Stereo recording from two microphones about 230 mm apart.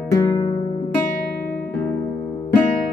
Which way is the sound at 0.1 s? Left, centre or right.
Centre.